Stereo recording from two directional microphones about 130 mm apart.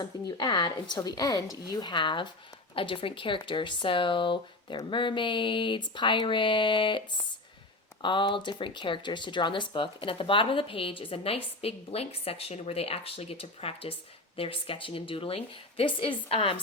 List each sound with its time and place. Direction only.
0.0 s speech: 35° left (ahead or behind)
8.0 s speech: 40° left (ahead or behind)